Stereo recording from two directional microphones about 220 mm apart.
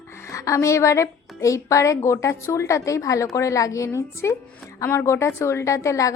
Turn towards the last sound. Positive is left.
turn(degrees=15)  # may be behind; listen again after turning